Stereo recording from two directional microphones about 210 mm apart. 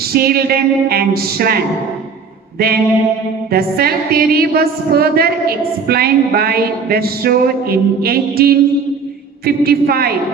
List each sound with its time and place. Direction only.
0.1 s a woman's voice: 45° right (ahead or behind)
2.6 s a woman's voice: 45° right (ahead or behind)